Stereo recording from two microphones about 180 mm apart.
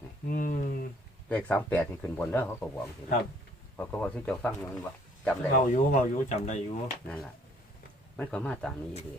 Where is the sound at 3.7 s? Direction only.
10° left (ahead or behind).